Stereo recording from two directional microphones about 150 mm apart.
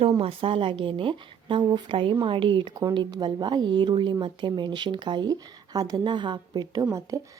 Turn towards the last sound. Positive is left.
turn(degrees=-20)  # may be behind; listen again after turning